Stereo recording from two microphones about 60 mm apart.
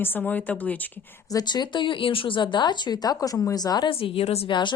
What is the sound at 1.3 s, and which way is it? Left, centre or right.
Speech, left.